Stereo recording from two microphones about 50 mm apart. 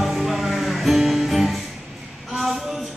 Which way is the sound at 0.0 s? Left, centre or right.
Centre.